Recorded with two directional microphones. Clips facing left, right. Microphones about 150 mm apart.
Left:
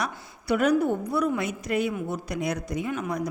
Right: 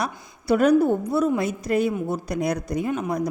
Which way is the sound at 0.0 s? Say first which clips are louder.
Right 3 dB; 35° right (ahead or behind).